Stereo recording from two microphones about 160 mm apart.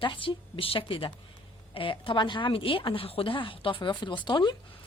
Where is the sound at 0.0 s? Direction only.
30° left (ahead or behind).